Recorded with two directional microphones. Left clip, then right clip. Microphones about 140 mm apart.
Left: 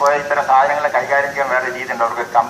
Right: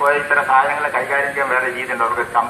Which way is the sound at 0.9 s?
25° left (ahead or behind).